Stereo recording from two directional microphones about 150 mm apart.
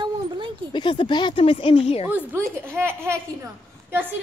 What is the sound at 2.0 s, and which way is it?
Speech, 15° right (ahead or behind).